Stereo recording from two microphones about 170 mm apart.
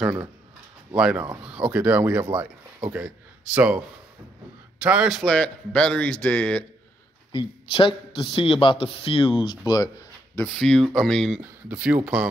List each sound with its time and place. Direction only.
0.0 s a man's voice: 10° right (ahead or behind)
4.8 s a man's voice: 5° right (ahead or behind)
7.7 s a man's voice: 30° left (ahead or behind)
9.7 s a sound: 20° left (ahead or behind)
10.4 s a man's voice: 5° left (ahead or behind)
11.4 s speech: 10° right (ahead or behind)